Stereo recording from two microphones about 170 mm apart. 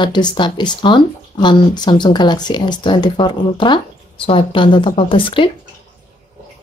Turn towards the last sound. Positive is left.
turn(degrees=30)  # may be behind; listen again after turning